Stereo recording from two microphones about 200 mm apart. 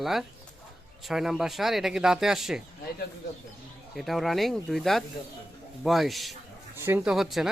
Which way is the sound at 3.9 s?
Centre (ahead or behind).